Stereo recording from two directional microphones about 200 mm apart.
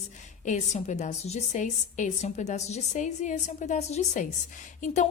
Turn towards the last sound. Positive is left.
turn(degrees=40)  # may be behind; listen again after turning